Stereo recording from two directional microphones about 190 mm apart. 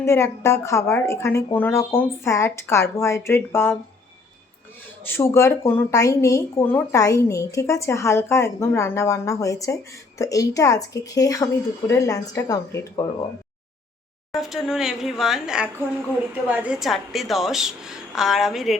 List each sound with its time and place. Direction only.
0.0 s speech: 15° left (ahead or behind)
5.0 s speech: 10° left (ahead or behind)
14.3 s speech: centre (ahead or behind)